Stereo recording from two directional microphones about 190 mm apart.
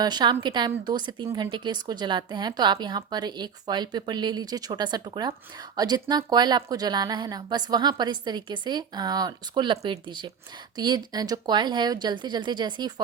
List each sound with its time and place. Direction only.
0.0 s a woman's voice: 25° right (ahead or behind)